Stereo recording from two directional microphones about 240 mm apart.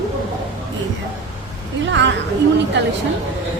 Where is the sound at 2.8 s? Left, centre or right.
Right.